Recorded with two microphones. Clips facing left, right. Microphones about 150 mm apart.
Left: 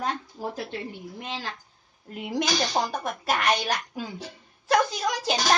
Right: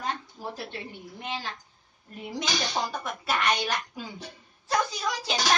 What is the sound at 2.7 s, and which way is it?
Speech, 40° left (ahead or behind).